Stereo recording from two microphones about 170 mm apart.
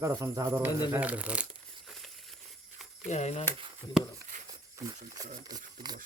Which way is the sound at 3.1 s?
40° left (ahead or behind).